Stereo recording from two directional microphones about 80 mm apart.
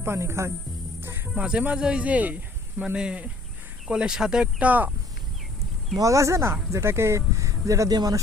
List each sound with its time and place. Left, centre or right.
0.0 s speech: right
1.4 s speech: centre
6.0 s speech: right